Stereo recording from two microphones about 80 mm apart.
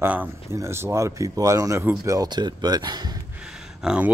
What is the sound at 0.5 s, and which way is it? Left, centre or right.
Speech, right.